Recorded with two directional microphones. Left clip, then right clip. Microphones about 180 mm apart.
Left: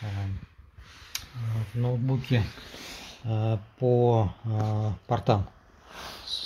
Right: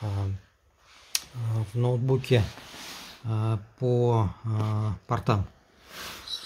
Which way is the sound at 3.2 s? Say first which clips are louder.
Left 2 dB; 60° right (ahead or behind).